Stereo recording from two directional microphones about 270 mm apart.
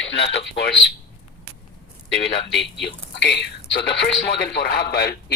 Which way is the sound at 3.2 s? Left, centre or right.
Left.